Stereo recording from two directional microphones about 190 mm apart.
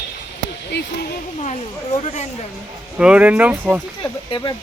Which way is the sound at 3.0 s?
5° right (ahead or behind).